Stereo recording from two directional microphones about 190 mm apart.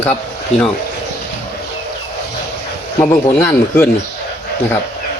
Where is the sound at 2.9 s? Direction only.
10° left (ahead or behind).